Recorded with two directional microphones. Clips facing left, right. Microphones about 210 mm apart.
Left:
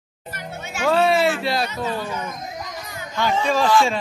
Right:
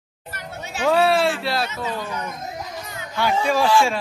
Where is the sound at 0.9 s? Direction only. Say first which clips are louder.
Left 1 dB; 5° right (ahead or behind).